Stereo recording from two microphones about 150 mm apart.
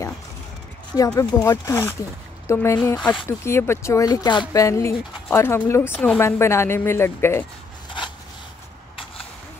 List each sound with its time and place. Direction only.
0.9 s speech: 20° left (ahead or behind)